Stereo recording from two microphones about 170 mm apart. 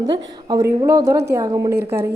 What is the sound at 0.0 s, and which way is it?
A woman's voice, 20° right (ahead or behind).